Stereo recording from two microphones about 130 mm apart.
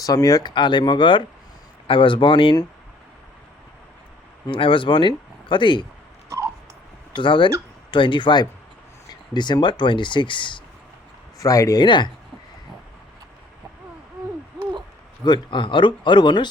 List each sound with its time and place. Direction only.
0.0 s speech: 25° left (ahead or behind)
4.4 s speech: 40° left (ahead or behind)
7.2 s speech: 40° left (ahead or behind)
11.3 s speech: 25° left (ahead or behind)
15.2 s speech: 35° left (ahead or behind)